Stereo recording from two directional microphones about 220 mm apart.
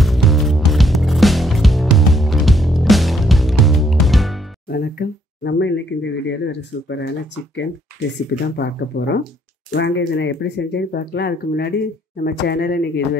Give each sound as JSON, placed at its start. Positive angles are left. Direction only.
{"t": 0.0, "sound": "music", "side_deg": 0}
{"t": 4.6, "sound": "speech", "side_deg": 45}
{"t": 8.5, "sound": "speech", "side_deg": 50}